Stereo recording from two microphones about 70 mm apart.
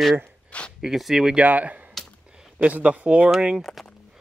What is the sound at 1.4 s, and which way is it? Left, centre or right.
Speech, right.